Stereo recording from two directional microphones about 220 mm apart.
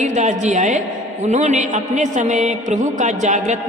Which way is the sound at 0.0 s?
35° right (ahead or behind).